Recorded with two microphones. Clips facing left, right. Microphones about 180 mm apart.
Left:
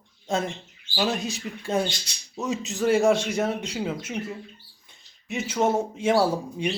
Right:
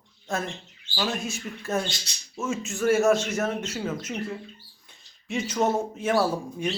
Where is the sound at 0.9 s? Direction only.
20° left (ahead or behind).